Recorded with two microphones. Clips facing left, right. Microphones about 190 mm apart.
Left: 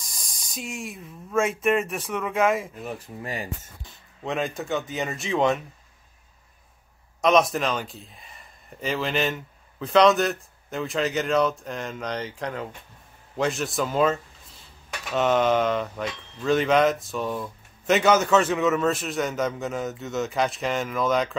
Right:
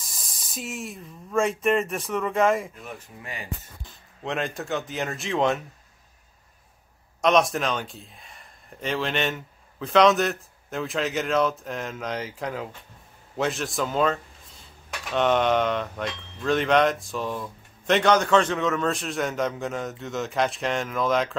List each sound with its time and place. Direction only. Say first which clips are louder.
0.0 s speech: even; centre (ahead or behind)
2.9 s speech: left 6 dB; 35° left (ahead or behind)
4.2 s speech: left 1 dB; centre (ahead or behind)
7.2 s speech: left 1 dB; centre (ahead or behind)